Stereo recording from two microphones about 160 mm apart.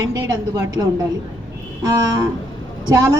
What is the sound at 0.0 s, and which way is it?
Speech, 20° right (ahead or behind).